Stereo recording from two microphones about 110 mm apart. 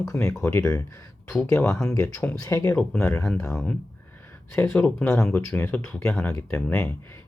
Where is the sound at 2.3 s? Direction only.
30° left (ahead or behind).